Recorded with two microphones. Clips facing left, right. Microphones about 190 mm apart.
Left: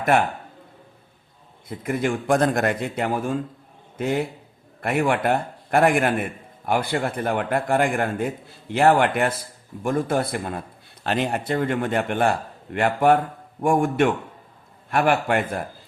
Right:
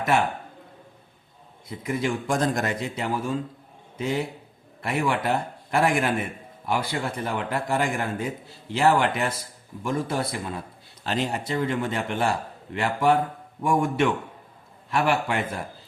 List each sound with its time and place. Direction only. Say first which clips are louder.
0.1 s a man's voice: left 2 dB; 55° left (ahead or behind)
1.6 s a man's voice: left 3 dB; 55° left (ahead or behind)